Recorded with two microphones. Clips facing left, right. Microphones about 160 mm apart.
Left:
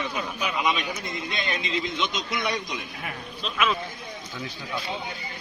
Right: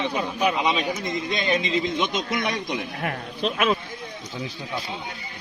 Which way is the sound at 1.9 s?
50° right (ahead or behind).